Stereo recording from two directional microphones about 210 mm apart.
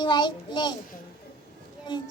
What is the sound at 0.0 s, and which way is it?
Child singing, 20° left (ahead or behind).